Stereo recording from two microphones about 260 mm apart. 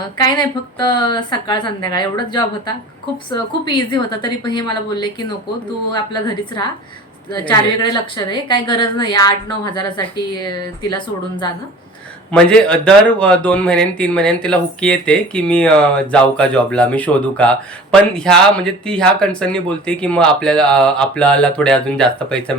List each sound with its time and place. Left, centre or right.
0.2 s a woman's voice: centre
12.3 s speech: centre